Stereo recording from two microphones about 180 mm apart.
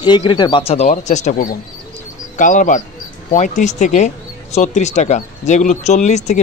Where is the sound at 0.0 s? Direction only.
25° left (ahead or behind).